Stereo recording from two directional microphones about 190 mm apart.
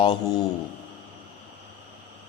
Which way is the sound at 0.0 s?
25° left (ahead or behind).